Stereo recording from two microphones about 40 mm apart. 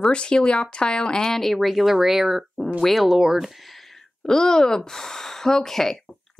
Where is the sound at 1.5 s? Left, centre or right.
Centre.